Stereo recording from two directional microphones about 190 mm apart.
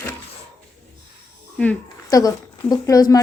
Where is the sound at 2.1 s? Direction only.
20° left (ahead or behind).